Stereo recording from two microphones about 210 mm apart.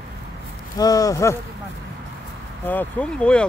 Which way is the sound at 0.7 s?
15° left (ahead or behind).